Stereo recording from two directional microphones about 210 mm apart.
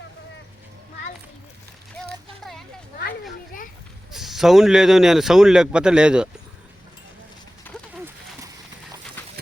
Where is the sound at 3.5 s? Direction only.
40° left (ahead or behind).